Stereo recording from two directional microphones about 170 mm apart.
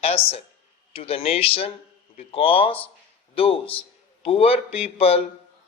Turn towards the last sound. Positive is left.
turn(degrees=35)  # may be behind; listen again after turning